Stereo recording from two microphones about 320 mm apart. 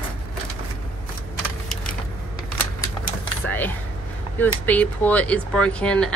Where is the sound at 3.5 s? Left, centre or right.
Centre.